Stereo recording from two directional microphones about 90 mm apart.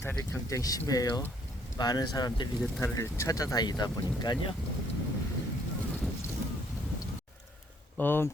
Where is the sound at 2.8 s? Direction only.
35° left (ahead or behind); by 4.5 s 55° left (ahead or behind).